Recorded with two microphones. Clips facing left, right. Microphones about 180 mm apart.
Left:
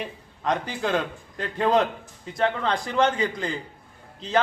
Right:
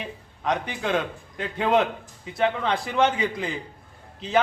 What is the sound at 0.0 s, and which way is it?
A man's voice, centre (ahead or behind).